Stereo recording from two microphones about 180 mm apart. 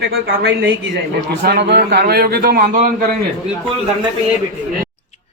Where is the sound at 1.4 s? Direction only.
65° right (ahead or behind); by 2.9 s 50° right (ahead or behind).